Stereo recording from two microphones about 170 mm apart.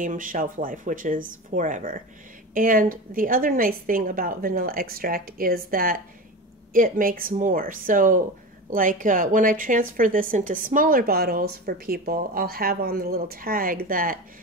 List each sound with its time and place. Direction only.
0.0 s a woman's voice: 50° right (ahead or behind)